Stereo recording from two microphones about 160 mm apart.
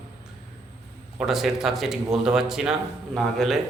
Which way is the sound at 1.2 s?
Centre (ahead or behind).